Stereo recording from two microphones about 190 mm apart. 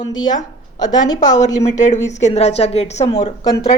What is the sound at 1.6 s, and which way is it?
A woman's voice, 40° left (ahead or behind).